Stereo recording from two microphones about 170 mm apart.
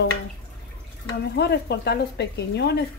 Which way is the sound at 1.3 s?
75° left (ahead or behind).